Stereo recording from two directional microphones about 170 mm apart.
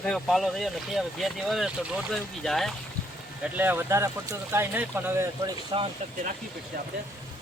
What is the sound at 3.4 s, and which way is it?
Speech, 10° right (ahead or behind).